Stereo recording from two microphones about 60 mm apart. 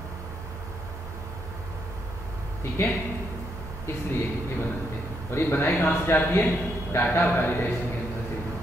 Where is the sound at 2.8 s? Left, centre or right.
Left.